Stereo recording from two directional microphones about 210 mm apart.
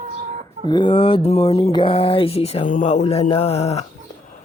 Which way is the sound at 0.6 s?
20° left (ahead or behind).